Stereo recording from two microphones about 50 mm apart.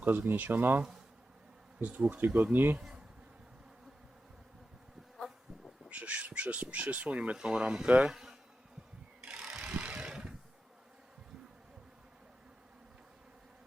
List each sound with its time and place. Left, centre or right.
0.0 s speech: right
2.0 s speech: right
5.9 s speech: right
8.1 s bee: centre
9.2 s wood: centre